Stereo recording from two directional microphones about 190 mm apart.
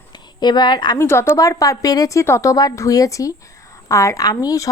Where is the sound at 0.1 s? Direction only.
25° left (ahead or behind).